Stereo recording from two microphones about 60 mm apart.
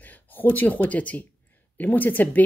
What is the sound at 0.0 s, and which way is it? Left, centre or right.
Speech, left.